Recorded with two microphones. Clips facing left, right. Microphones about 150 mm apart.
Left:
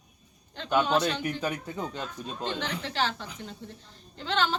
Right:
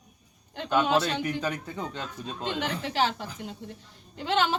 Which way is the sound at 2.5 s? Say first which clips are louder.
Right 6 dB; 10° right (ahead or behind).